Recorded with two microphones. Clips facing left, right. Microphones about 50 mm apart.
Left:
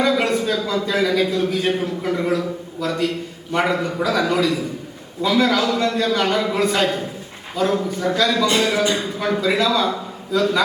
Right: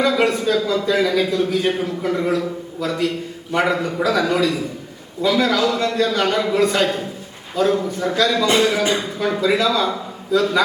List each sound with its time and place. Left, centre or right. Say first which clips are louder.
0.0 s a man's voice: right 1 dB; centre
8.5 s speech: right 1 dB; centre
9.1 s a man's voice: right 1 dB; centre